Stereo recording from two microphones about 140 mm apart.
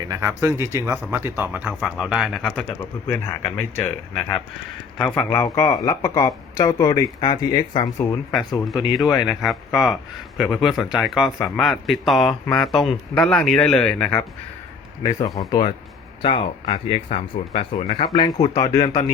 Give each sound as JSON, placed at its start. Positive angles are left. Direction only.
{"t": 0.1, "sound": "speech", "side_deg": -20}
{"t": 8.6, "sound": "speech", "side_deg": 0}
{"t": 15.0, "sound": "speech", "side_deg": 20}
{"t": 16.2, "sound": "speech", "side_deg": 40}
{"t": 18.1, "sound": "speech", "side_deg": 30}